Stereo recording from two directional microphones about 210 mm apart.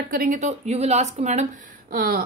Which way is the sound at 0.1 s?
40° right (ahead or behind).